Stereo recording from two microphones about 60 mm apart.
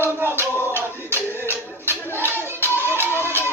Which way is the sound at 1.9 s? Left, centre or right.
Right.